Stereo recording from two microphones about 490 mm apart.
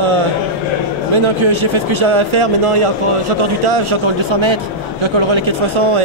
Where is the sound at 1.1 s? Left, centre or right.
Right.